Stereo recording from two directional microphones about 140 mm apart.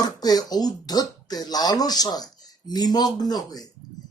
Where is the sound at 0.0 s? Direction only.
30° left (ahead or behind).